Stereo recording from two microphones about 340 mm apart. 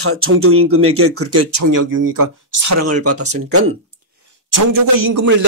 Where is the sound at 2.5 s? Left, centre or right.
Right.